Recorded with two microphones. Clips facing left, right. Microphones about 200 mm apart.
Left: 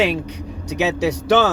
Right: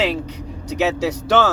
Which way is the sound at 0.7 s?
15° left (ahead or behind).